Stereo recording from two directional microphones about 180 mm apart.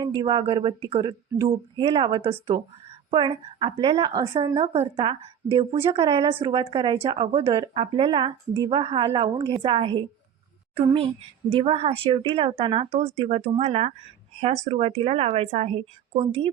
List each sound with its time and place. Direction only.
0.0 s a woman's voice: 25° right (ahead or behind)